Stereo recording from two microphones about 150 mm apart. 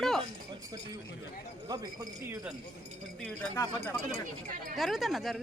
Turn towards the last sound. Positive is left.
turn(degrees=0)  # may be behind; listen again after turning